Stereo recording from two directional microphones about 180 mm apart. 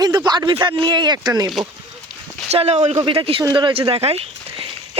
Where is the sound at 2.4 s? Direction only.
35° right (ahead or behind).